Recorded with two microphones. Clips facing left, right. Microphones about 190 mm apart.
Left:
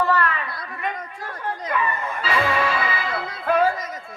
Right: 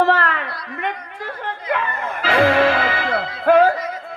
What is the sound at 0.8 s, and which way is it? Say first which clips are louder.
Speech: right 3 dB; 85° right.